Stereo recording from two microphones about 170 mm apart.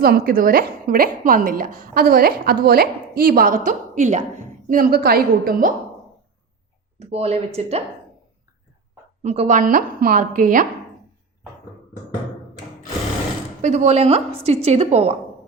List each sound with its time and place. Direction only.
0.0 s a woman's voice: 60° right (ahead or behind)
7.0 s a woman's voice: 35° right (ahead or behind)
9.2 s a woman's voice: 40° right (ahead or behind)
13.6 s a woman's voice: 45° right (ahead or behind)